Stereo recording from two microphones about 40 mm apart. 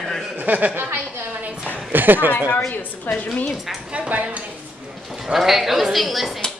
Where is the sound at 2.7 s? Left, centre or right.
Left.